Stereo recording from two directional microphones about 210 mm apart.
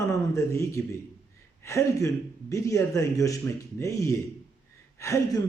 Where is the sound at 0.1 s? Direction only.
15° left (ahead or behind).